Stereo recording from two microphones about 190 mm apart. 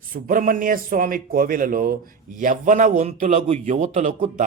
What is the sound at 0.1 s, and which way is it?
Speech, 45° right (ahead or behind).